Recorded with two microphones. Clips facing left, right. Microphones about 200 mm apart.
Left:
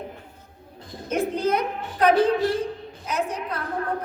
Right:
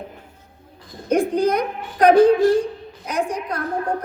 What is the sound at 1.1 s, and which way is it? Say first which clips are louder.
A woman's voice: right 5 dB; 15° right (ahead or behind).